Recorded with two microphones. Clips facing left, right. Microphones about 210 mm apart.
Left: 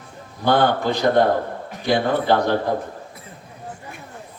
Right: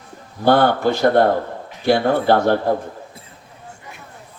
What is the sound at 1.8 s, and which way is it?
Speech, 50° right (ahead or behind).